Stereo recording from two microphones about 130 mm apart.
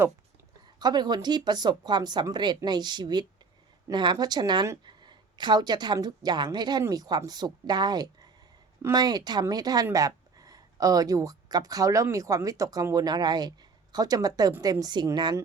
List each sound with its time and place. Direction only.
0.8 s a woman's voice: 30° right (ahead or behind)